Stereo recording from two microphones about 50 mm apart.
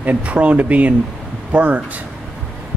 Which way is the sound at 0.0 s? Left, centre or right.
Right.